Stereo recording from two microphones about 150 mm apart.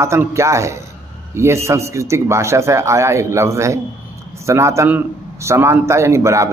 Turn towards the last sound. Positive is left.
turn(degrees=-20)  # may be behind; listen again after turning